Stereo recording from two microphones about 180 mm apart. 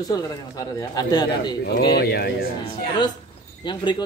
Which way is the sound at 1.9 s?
65° left (ahead or behind).